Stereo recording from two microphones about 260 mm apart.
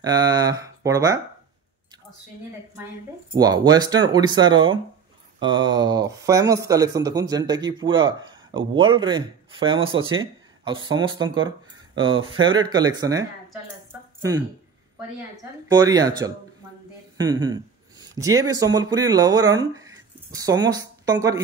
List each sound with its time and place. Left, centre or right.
0.0 s speech: centre
3.3 s speech: centre
15.7 s speech: centre